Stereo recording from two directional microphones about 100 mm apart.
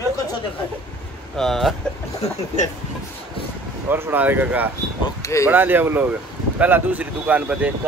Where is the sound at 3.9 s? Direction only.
20° right (ahead or behind).